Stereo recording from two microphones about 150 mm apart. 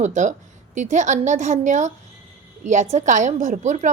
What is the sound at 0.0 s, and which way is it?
A woman's voice, 50° right (ahead or behind).